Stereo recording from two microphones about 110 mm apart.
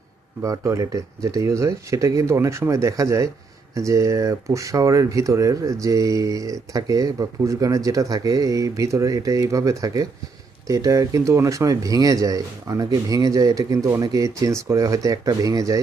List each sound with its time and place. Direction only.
0.4 s speech: 30° right (ahead or behind)